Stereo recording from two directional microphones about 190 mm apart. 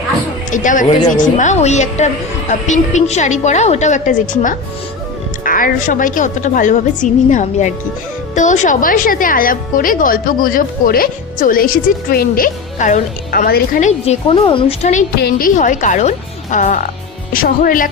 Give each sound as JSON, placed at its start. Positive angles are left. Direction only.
{"t": 0.5, "sound": "a woman's voice", "side_deg": 40}
{"t": 15.2, "sound": "a woman's voice", "side_deg": 50}